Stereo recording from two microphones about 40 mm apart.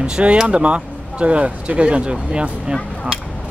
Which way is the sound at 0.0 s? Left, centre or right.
Right.